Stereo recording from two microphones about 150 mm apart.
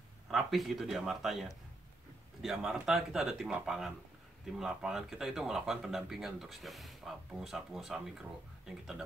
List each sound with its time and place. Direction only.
0.3 s speech: centre (ahead or behind)